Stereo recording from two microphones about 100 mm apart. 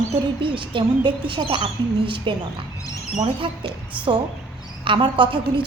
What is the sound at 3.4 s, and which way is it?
A woman's voice, 55° right (ahead or behind).